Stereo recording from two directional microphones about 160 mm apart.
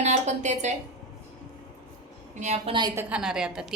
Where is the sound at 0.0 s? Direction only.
45° right (ahead or behind).